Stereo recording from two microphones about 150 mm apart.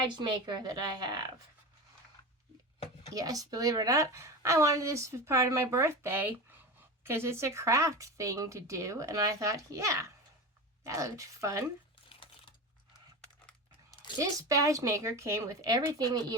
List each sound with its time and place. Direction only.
0.0 s a woman's voice: 30° right (ahead or behind)
3.2 s a woman's voice: 25° right (ahead or behind)
12.0 s a sound: 35° left (ahead or behind)
14.2 s a woman's voice: 20° right (ahead or behind)